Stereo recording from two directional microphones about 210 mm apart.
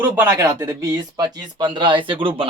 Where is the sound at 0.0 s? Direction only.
10° right (ahead or behind).